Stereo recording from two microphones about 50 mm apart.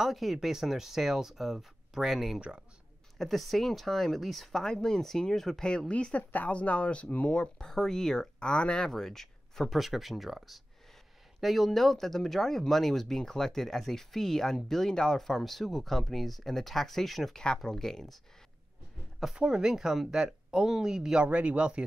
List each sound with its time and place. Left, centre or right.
0.0 s speech: centre
5.9 s speech: left
6.3 s speech: left
7.3 s speech: centre
8.9 s speech: centre
19.3 s speech: centre
21.3 s speech: right